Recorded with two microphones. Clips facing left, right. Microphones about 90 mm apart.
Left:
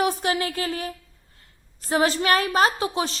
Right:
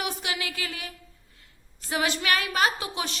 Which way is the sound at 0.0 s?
40° left (ahead or behind).